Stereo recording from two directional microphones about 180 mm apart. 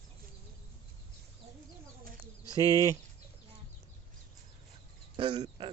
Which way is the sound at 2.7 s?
20° right (ahead or behind).